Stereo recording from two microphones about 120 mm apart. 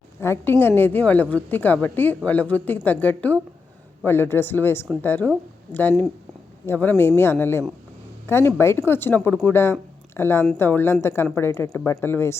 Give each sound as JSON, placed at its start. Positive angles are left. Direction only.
{"t": 0.2, "sound": "a woman's voice", "side_deg": 20}
{"t": 6.7, "sound": "a woman's voice", "side_deg": 20}